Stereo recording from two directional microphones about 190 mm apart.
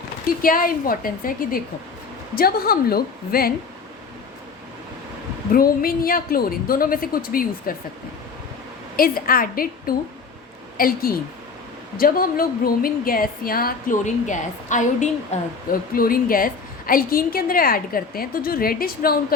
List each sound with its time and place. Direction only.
0.4 s a woman's voice: 50° left (ahead or behind)
5.5 s a woman's voice: 50° left (ahead or behind)
9.0 s a woman's voice: 50° left (ahead or behind)